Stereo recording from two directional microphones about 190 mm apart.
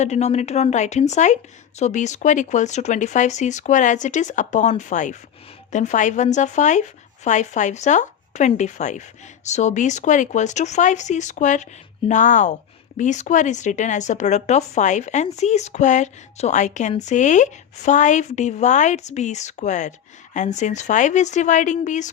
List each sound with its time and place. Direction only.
0.0 s speech: 35° left (ahead or behind)